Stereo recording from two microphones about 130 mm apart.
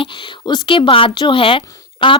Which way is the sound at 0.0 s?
35° left (ahead or behind).